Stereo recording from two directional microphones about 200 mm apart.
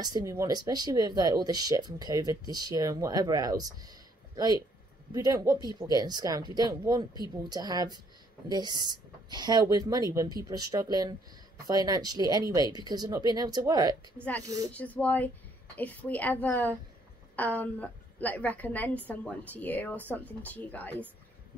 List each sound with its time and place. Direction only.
0.0 s speech: 15° right (ahead or behind)
14.7 s a woman's voice: 5° left (ahead or behind)